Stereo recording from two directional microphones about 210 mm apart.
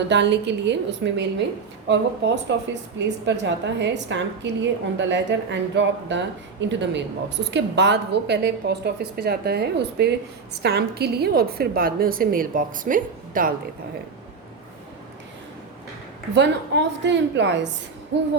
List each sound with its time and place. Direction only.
0.1 s a woman's voice: 55° right (ahead or behind)
16.3 s a woman's voice: 55° right (ahead or behind)